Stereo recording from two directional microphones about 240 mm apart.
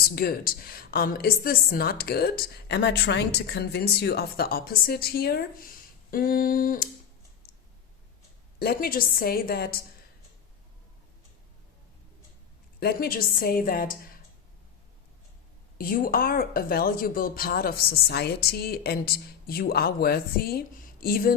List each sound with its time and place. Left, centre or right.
0.0 s a woman's voice: left
8.5 s a woman's voice: left
12.8 s a woman's voice: left
15.8 s a woman's voice: left